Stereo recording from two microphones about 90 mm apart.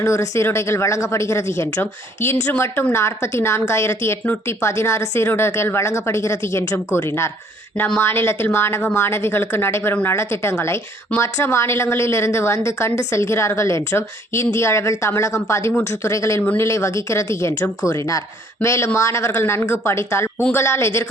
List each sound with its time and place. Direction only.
0.0 s a woman's voice: 35° left (ahead or behind)